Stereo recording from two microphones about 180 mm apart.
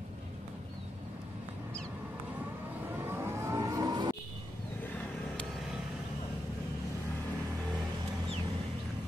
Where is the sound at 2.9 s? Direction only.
15° right (ahead or behind).